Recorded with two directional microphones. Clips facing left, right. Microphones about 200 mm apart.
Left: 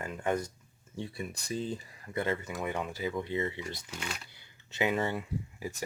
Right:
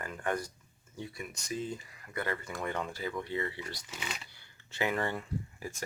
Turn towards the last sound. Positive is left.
turn(degrees=15)  # may be behind; listen again after turning